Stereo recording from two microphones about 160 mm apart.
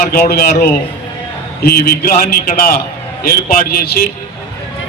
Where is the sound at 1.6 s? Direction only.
70° left (ahead or behind).